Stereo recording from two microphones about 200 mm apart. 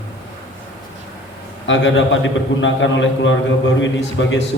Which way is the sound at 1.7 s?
65° left (ahead or behind).